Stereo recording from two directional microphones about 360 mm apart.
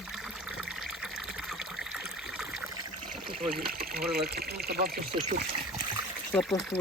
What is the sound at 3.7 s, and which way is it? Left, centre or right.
Speech, right.